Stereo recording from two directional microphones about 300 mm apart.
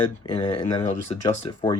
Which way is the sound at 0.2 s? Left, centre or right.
Centre.